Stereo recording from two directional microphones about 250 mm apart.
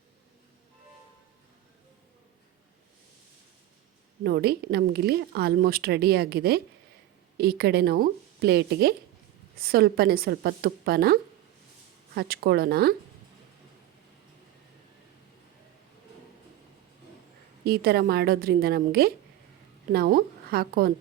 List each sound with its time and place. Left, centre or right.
4.2 s a woman's voice: right
17.7 s a woman's voice: right